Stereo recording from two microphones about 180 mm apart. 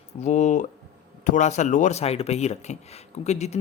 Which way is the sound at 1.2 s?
45° left (ahead or behind).